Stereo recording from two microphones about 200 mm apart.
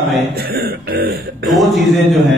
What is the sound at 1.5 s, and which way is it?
Speech, centre (ahead or behind).